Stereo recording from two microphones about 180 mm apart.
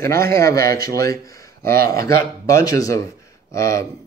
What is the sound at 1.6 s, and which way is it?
Speech, 55° right (ahead or behind).